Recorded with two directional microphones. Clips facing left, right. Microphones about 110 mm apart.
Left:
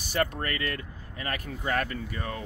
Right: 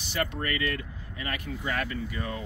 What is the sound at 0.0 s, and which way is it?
Speech, 40° left (ahead or behind).